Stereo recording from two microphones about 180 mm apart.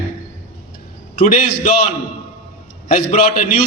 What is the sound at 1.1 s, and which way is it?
Speech, 45° left (ahead or behind).